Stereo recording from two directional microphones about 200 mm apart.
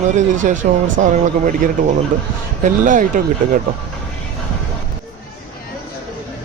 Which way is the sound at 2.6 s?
40° right (ahead or behind).